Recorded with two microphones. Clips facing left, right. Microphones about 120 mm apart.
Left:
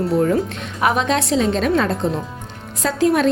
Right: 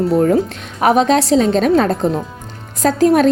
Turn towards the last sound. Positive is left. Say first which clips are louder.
# right 5 dB
turn(degrees=-45)  # may be behind; listen again after turning